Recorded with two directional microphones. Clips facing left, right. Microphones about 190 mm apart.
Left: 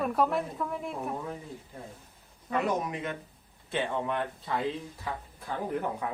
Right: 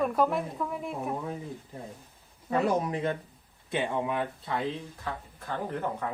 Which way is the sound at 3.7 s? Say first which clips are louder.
Right 1 dB; 5° right (ahead or behind).